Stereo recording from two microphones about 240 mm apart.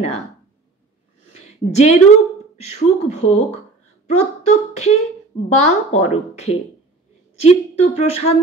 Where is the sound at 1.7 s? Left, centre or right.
Left.